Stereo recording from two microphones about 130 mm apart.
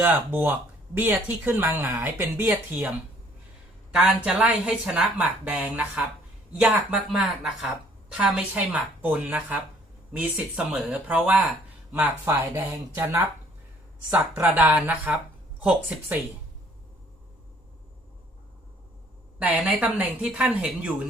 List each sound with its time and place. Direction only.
0.0 s a woman's voice: 15° right (ahead or behind)
3.9 s a woman's voice: 10° right (ahead or behind)
19.4 s a woman's voice: 10° right (ahead or behind)